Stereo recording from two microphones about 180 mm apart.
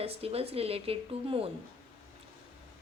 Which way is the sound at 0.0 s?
35° right (ahead or behind).